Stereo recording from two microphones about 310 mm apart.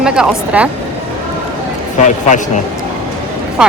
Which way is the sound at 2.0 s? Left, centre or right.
Left.